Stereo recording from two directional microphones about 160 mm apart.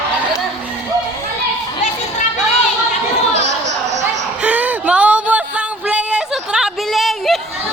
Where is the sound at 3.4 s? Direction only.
90° right.